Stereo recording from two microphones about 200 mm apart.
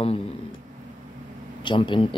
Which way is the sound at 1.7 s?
25° left (ahead or behind).